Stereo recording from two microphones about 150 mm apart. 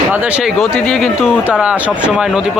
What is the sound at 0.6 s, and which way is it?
Speech, 5° left (ahead or behind).